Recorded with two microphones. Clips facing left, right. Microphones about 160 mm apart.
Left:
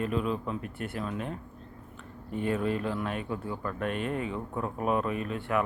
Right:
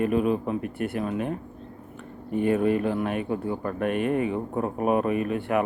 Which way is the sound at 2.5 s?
55° right (ahead or behind).